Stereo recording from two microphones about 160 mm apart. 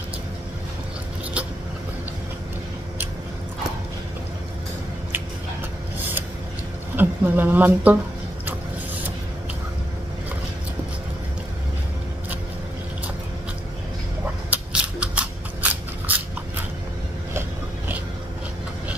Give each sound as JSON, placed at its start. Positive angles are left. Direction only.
{"t": 7.0, "sound": "a woman's voice", "side_deg": -10}
{"t": 14.5, "sound": "scissors", "side_deg": -5}
{"t": 17.3, "sound": "a sound", "side_deg": -15}